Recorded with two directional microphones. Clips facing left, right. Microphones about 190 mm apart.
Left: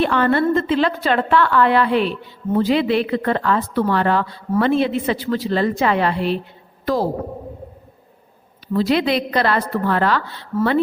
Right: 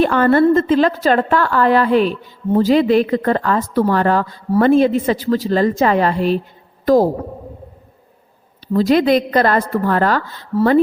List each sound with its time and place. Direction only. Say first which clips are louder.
0.0 s a woman's voice: right 5 dB; 45° right (ahead or behind)
8.7 s a woman's voice: right 5 dB; 45° right (ahead or behind)